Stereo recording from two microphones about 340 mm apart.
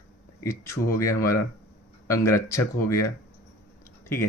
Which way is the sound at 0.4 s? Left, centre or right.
Centre.